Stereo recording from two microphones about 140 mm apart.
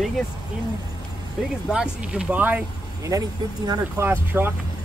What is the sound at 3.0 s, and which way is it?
Speech, 25° right (ahead or behind).